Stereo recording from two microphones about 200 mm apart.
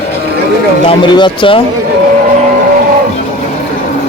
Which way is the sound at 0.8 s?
20° left (ahead or behind).